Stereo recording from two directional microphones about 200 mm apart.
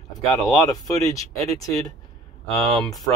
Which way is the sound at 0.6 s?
15° left (ahead or behind).